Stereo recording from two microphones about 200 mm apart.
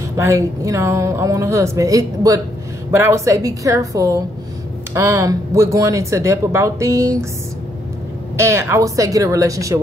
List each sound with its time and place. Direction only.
0.2 s speech: 15° right (ahead or behind)
8.4 s speech: 15° right (ahead or behind)